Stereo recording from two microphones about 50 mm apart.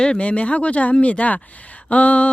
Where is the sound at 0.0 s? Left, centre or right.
Centre.